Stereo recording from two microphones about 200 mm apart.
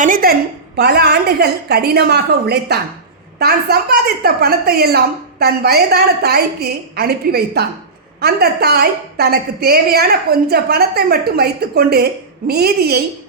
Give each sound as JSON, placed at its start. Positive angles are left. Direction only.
{"t": 0.0, "sound": "a woman's voice", "side_deg": -45}